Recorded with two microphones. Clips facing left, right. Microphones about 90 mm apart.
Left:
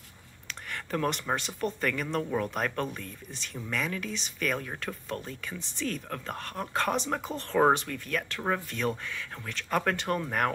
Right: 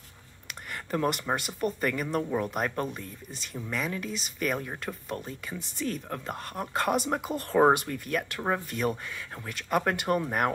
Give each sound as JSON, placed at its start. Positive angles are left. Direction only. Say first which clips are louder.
{"t": 0.9, "sound": "speech", "louder": "right 2 dB", "side_deg": -10}